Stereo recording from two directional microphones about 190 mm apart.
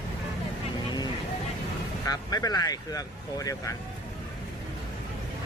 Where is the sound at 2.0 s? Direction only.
20° left (ahead or behind).